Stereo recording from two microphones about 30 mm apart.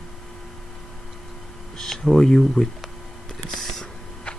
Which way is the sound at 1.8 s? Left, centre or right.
Centre.